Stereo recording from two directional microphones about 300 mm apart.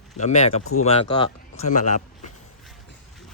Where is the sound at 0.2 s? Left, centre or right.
Left.